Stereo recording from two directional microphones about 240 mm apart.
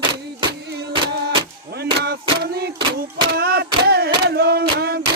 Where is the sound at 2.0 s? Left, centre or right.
Right.